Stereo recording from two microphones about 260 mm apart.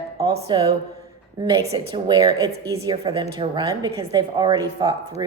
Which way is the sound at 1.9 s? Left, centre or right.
Centre.